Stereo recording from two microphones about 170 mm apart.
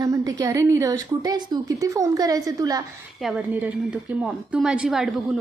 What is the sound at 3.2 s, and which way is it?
A woman's voice, 5° right (ahead or behind).